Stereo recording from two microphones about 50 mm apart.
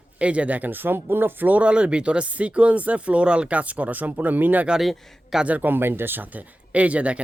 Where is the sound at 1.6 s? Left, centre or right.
Right.